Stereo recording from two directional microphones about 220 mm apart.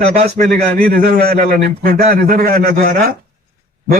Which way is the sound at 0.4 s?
35° right (ahead or behind).